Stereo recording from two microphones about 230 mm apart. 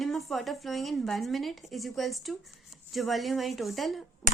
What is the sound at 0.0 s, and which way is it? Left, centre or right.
A woman's voice, centre.